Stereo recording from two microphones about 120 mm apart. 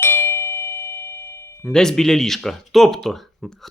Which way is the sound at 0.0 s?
20° left (ahead or behind).